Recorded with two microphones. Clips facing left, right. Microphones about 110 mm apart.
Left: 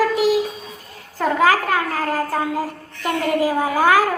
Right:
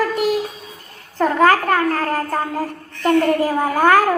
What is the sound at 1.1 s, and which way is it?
A child's voice, 5° left (ahead or behind).